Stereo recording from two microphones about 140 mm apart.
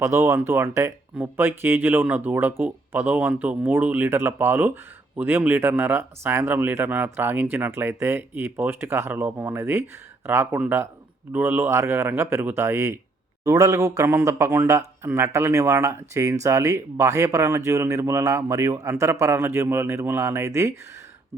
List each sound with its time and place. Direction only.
0.0 s speech: 20° right (ahead or behind)